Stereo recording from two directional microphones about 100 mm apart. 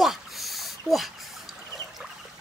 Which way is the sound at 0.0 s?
Centre (ahead or behind).